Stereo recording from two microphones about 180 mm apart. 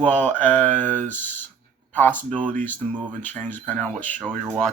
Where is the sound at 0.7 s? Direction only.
45° right (ahead or behind).